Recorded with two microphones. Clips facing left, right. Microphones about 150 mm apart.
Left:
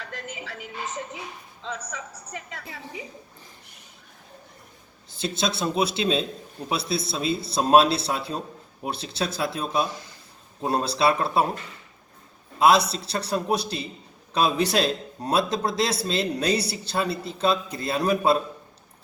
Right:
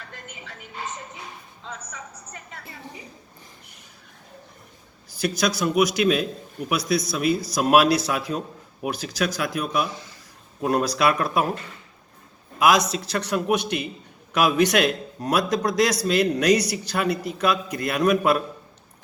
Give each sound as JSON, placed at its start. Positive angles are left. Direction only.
{"t": 0.0, "sound": "music", "side_deg": 90}
{"t": 1.6, "sound": "a woman's voice", "side_deg": 90}
{"t": 5.1, "sound": "a man's voice", "side_deg": 25}
{"t": 12.5, "sound": "a man's voice", "side_deg": 30}